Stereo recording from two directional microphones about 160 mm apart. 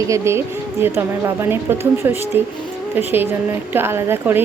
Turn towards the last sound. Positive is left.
turn(degrees=-15)  # may be behind; listen again after turning